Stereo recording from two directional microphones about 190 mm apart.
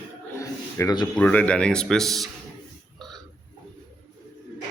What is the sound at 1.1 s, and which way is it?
Speech, 5° left (ahead or behind).